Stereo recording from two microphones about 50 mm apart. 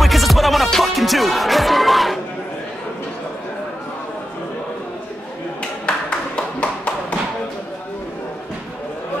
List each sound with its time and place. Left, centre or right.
0.0 s music: centre
6.0 s tap: left